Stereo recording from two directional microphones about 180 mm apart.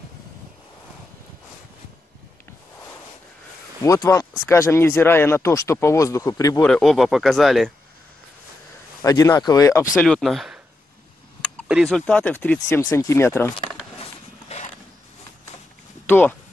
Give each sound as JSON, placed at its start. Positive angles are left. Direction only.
{"t": 3.8, "sound": "speech", "side_deg": 20}
{"t": 6.6, "sound": "speech", "side_deg": 0}
{"t": 9.0, "sound": "speech", "side_deg": 20}
{"t": 9.9, "sound": "speech", "side_deg": 5}
{"t": 11.6, "sound": "speech", "side_deg": 0}
{"t": 16.1, "sound": "speech", "side_deg": 10}